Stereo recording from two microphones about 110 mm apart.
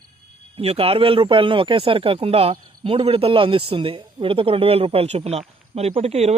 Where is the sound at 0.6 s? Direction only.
65° right (ahead or behind).